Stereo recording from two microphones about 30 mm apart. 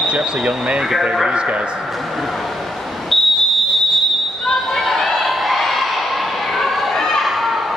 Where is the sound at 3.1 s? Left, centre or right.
Centre.